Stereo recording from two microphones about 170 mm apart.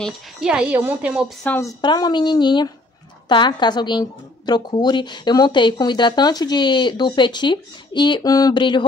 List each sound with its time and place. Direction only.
0.0 s speech: 5° right (ahead or behind)
1.4 s a woman's voice: 15° left (ahead or behind)